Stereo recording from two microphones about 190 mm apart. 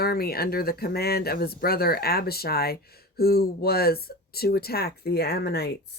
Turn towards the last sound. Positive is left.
turn(degrees=55)  # may be behind; listen again after turning